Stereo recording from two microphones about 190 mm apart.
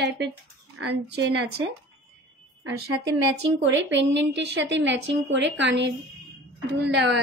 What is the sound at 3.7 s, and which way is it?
Speech, 70° right (ahead or behind).